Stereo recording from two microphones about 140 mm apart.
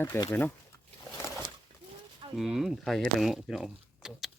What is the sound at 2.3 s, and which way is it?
Speech, centre (ahead or behind).